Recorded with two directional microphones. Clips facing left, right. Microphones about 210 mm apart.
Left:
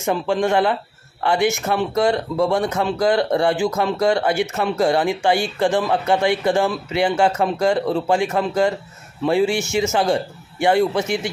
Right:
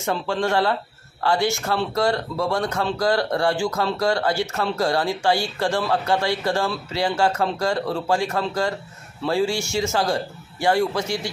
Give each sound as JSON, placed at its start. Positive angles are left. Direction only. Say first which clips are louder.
{"t": 0.0, "sound": "speech", "louder": "left 4 dB", "side_deg": 15}